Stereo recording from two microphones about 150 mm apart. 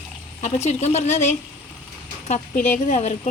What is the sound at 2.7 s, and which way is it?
Speech, 50° left (ahead or behind).